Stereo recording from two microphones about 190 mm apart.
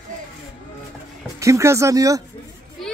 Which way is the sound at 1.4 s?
15° right (ahead or behind).